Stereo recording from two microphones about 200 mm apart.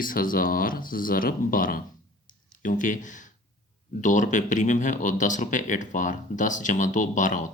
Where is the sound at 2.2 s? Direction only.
40° left (ahead or behind).